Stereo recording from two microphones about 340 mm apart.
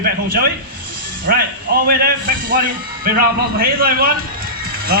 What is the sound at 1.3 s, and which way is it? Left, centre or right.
A man's voice, right.